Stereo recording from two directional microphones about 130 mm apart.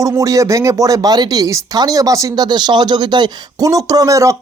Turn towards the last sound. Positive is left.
turn(degrees=-25)  # may be behind; listen again after turning